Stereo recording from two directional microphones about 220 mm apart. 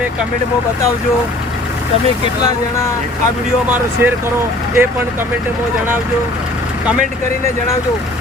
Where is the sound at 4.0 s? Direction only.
10° right (ahead or behind).